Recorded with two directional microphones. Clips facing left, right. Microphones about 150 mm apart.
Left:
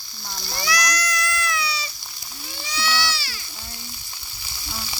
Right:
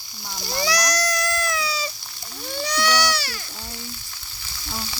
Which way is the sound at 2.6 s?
65° right (ahead or behind).